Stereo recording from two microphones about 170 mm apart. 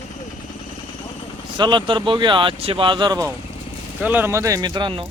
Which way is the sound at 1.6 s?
25° right (ahead or behind).